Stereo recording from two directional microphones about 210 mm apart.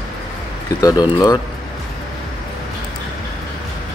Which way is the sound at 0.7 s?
15° left (ahead or behind).